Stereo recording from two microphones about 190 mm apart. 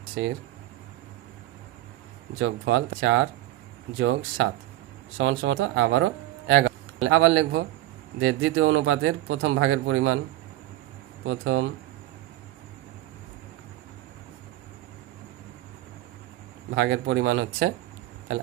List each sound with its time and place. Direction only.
0.2 s speech: 80° right
2.4 s speech: 85° right; by 6.7 s 65° right (ahead or behind)
7.1 s speech: 90° right
11.3 s speech: 90° right
16.7 s speech: 70° right (ahead or behind)